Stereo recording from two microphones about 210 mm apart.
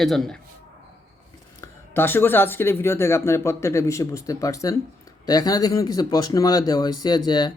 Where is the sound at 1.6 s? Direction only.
10° left (ahead or behind).